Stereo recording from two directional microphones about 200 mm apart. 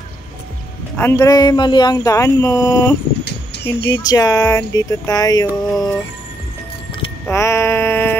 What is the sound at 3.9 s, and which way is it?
Speech, 20° left (ahead or behind).